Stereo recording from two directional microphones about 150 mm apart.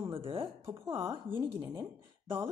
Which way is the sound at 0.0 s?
35° right (ahead or behind).